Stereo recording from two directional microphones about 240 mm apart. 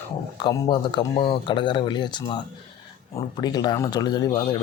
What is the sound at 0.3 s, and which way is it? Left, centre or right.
Speech, centre.